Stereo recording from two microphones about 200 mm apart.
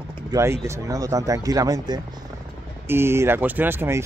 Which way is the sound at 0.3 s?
15° right (ahead or behind).